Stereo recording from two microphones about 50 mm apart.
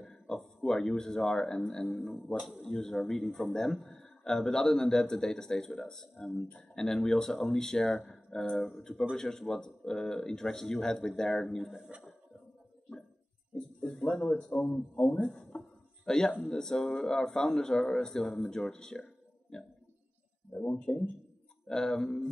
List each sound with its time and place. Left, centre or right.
0.0 s a sound: centre
1.9 s speech: centre
2.6 s speech: centre
13.6 s a sound: centre
15.1 s speech: centre
21.6 s speech: centre